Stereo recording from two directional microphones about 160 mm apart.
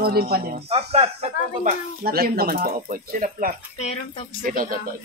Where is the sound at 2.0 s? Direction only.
70° right (ahead or behind).